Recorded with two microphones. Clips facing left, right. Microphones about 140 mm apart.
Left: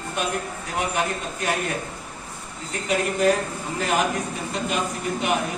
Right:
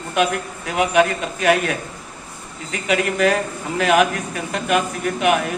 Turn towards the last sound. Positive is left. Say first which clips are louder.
# right 6 dB
turn(degrees=-70)  # may be behind; listen again after turning